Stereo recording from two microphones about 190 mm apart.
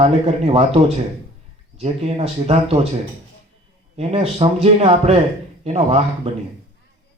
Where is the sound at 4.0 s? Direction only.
30° right (ahead or behind).